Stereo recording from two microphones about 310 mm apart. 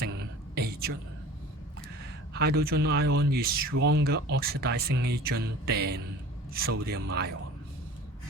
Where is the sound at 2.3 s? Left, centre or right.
Right.